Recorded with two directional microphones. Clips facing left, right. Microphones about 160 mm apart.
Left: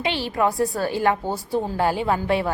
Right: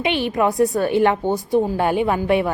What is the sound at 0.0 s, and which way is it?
A woman's voice, 20° right (ahead or behind).